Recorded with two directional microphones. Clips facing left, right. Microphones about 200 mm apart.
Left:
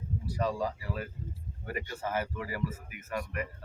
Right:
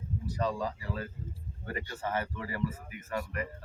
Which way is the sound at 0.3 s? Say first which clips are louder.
Left 1 dB; 10° left (ahead or behind).